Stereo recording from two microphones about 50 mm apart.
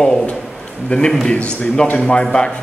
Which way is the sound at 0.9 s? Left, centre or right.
Left.